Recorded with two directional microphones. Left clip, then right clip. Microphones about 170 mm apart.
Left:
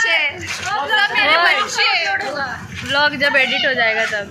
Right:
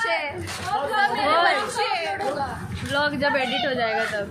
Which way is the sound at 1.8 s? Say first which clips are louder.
Left 8 dB; 50° right (ahead or behind).